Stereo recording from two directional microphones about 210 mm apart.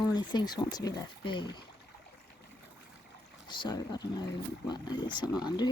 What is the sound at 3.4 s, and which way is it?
Speech, 20° left (ahead or behind).